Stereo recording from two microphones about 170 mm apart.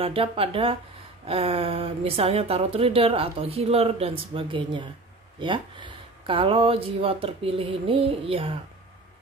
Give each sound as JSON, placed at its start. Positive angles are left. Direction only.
{"t": 0.0, "sound": "speech", "side_deg": -35}